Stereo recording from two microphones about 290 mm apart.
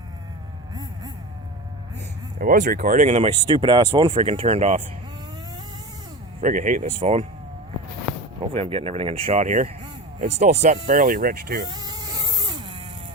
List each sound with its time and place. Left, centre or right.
2.4 s speech: right
6.4 s speech: right
8.4 s speech: centre
11.7 s cat: centre